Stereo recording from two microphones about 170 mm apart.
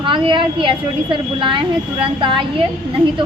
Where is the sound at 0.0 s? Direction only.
30° right (ahead or behind).